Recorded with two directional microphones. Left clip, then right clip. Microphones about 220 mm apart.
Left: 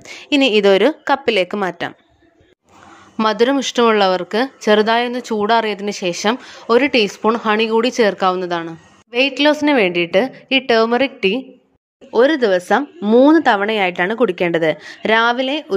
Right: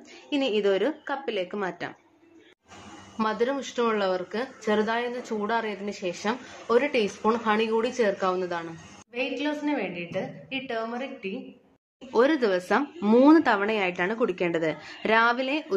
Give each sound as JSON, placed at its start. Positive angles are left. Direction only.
{"t": 0.3, "sound": "speech", "side_deg": 45}
{"t": 3.2, "sound": "speech", "side_deg": 50}
{"t": 12.1, "sound": "speech", "side_deg": 30}